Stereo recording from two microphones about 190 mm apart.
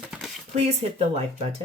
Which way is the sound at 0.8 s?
30° right (ahead or behind).